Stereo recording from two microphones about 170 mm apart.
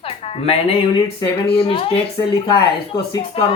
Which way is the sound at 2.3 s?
20° left (ahead or behind).